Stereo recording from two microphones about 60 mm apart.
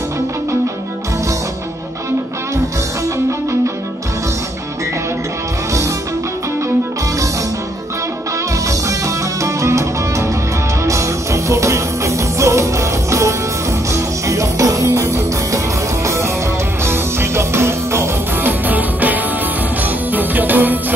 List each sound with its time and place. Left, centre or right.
8.6 s music: right
14.9 s music: right
16.8 s music: right
18.7 s music: right